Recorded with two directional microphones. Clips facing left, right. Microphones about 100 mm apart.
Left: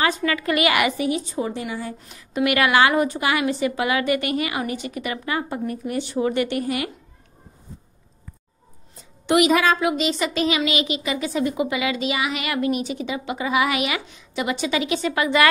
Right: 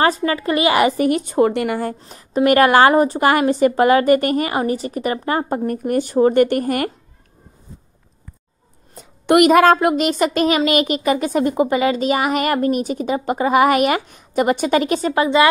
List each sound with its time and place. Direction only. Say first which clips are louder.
0.0 s speech: right 5 dB; 35° right (ahead or behind)
0.9 s speech: right 8 dB; 55° right (ahead or behind)
2.0 s a woman's voice: right 5 dB; 35° right (ahead or behind)
8.9 s a woman's voice: right 5 dB; 55° right (ahead or behind)